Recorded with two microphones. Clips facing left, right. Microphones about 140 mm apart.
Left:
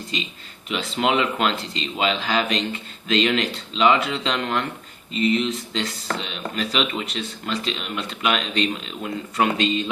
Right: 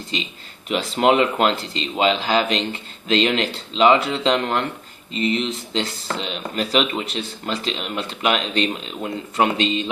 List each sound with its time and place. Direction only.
0.1 s speech: 30° right (ahead or behind)